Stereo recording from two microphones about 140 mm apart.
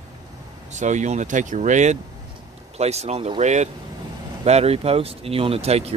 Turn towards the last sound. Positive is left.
turn(degrees=-45)  # may be behind; listen again after turning